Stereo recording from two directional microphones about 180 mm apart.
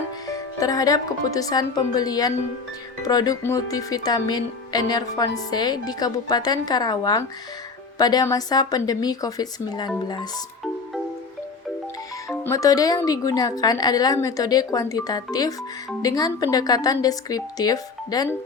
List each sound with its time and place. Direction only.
0.3 s speech: 20° left (ahead or behind)
12.3 s speech: 15° left (ahead or behind)